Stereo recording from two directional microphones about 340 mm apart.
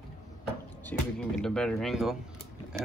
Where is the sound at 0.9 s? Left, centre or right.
Centre.